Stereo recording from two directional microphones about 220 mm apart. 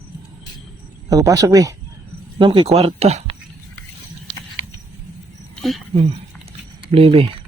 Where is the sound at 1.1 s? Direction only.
15° right (ahead or behind).